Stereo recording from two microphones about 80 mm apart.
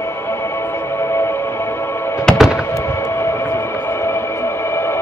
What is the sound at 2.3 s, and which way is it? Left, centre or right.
Music, centre.